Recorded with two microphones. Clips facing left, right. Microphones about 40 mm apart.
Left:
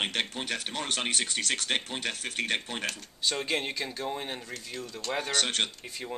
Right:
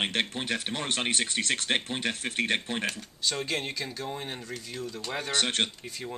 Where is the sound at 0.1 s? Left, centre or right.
Right.